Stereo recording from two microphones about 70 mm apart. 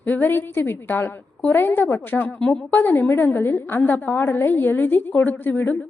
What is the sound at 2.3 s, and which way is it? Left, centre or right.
Speech, centre.